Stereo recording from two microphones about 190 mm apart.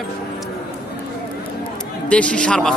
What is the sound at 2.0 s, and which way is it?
Speech, 5° left (ahead or behind).